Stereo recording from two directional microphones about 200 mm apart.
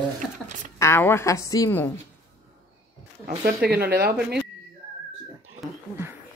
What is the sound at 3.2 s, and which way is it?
Speech, 50° right (ahead or behind).